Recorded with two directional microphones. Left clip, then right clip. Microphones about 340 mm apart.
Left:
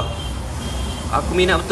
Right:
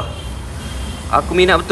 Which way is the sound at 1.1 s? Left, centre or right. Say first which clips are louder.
Right 5 dB; centre.